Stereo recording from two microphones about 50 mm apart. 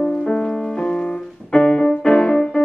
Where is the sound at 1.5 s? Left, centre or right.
Centre.